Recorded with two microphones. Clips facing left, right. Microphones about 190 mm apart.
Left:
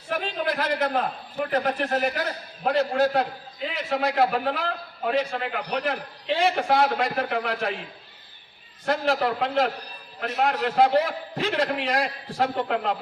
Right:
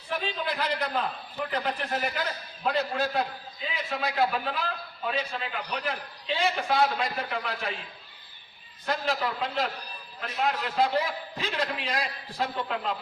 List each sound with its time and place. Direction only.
0.1 s a man's voice: 50° left (ahead or behind)
3.2 s a man's voice: 70° left (ahead or behind)
8.9 s a man's voice: 60° left (ahead or behind)